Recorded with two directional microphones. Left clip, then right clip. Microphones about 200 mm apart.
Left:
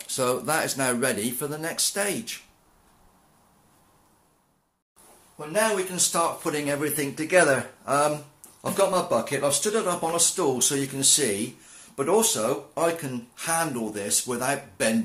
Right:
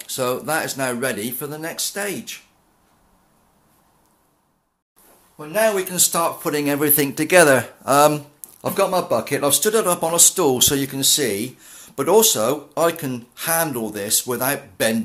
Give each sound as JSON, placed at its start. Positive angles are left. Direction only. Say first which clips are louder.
{"t": 0.0, "sound": "speech", "louder": "right 3 dB", "side_deg": -10}
{"t": 5.9, "sound": "speech", "louder": "right 4 dB", "side_deg": -45}
{"t": 11.9, "sound": "speech", "louder": "right 7 dB", "side_deg": -40}